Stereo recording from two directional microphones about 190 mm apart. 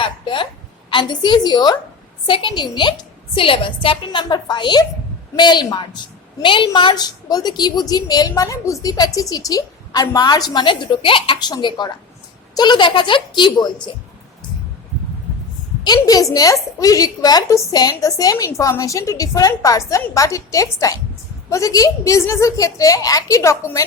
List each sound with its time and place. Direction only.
0.0 s a sound: 25° left (ahead or behind)
0.9 s a woman's voice: 25° left (ahead or behind)
15.8 s a woman's voice: 20° left (ahead or behind)